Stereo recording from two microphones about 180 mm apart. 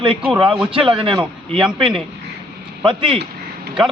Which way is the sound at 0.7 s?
30° right (ahead or behind).